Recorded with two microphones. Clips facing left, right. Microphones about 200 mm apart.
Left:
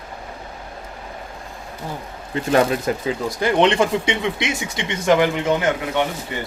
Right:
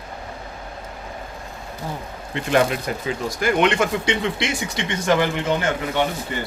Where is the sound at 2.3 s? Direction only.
35° left (ahead or behind); by 5.6 s 15° left (ahead or behind).